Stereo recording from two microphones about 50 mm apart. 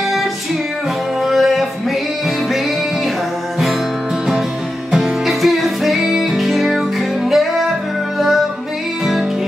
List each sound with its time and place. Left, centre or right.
1.2 s music: centre
4.9 s music: centre